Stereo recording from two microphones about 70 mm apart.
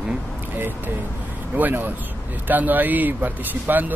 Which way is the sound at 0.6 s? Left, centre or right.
Right.